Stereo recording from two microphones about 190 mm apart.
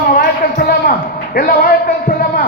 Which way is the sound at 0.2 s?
50° left (ahead or behind).